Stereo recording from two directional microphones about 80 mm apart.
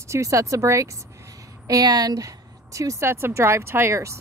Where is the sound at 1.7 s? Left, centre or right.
Right.